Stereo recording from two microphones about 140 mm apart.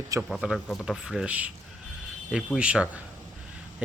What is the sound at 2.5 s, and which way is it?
Speech, 5° right (ahead or behind).